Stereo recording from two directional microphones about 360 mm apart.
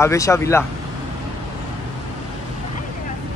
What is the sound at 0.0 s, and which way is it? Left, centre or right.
Speech, centre.